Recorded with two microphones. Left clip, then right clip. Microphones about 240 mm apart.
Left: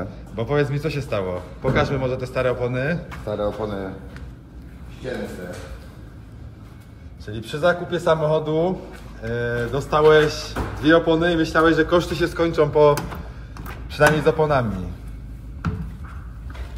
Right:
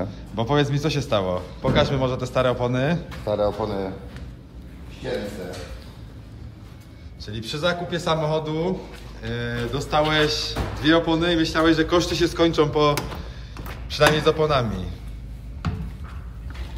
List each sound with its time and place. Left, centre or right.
0.4 s a man's voice: centre
3.3 s speech: right
7.2 s speech: centre